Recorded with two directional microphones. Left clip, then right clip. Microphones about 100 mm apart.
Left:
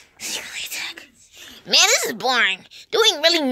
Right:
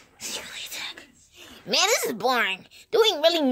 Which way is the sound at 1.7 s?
Centre (ahead or behind).